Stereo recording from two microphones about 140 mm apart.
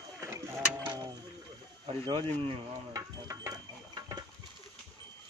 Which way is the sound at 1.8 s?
40° right (ahead or behind).